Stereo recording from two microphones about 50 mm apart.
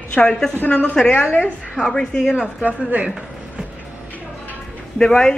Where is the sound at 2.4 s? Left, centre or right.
Right.